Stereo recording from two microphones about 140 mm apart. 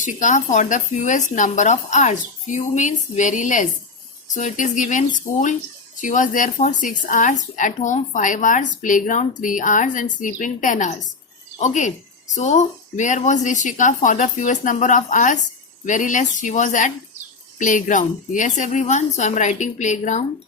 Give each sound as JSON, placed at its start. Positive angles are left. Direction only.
{"t": 0.0, "sound": "speech", "side_deg": 65}